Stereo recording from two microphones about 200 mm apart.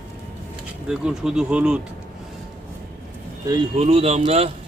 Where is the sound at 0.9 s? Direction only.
5° right (ahead or behind).